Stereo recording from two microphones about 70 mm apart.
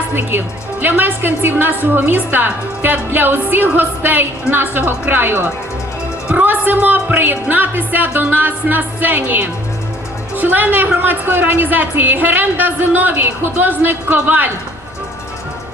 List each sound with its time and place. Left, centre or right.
0.1 s a woman's voice: right